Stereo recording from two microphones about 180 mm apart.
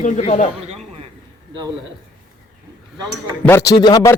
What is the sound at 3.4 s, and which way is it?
Speech, 15° left (ahead or behind).